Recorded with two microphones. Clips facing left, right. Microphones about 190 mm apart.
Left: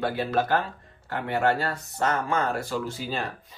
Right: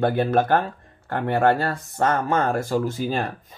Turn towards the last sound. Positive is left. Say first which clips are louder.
# right 6 dB
turn(degrees=-45)  # may be behind; listen again after turning